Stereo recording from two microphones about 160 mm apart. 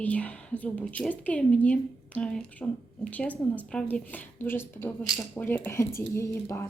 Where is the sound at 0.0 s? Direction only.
10° left (ahead or behind).